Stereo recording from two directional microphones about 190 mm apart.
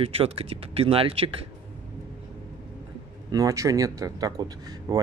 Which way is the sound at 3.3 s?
20° right (ahead or behind).